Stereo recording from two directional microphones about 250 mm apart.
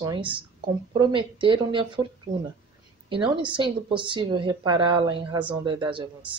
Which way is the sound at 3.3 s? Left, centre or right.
Centre.